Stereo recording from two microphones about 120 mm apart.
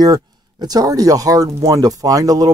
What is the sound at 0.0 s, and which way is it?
Speech, 35° right (ahead or behind).